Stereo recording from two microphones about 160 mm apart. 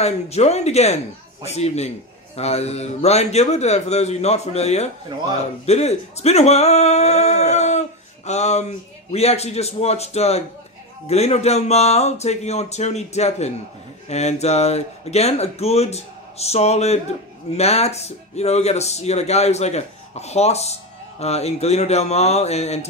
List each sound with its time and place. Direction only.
0.0 s speech: 40° left (ahead or behind)